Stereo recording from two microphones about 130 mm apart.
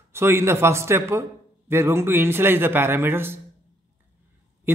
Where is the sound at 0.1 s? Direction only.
20° right (ahead or behind).